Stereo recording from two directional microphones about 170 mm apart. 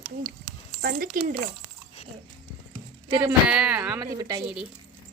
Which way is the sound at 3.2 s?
5° right (ahead or behind).